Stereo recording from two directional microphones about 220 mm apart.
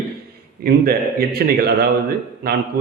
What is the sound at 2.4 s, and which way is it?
Speech, 45° right (ahead or behind).